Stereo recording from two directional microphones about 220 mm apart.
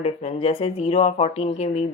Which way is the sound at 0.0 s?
30° left (ahead or behind).